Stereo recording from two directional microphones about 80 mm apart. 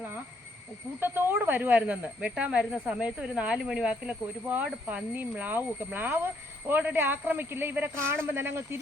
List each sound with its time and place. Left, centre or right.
0.9 s speech: right; by 4.2 s centre
4.4 s speech: right